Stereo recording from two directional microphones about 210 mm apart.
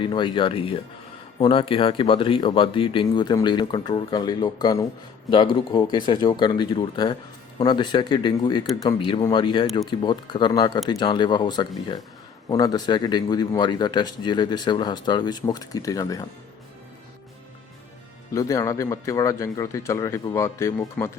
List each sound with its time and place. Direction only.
0.0 s speech: 20° left (ahead or behind)
18.3 s a man's voice: 15° left (ahead or behind)